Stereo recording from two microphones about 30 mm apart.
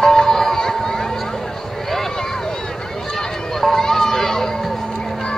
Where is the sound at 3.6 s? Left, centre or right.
Centre.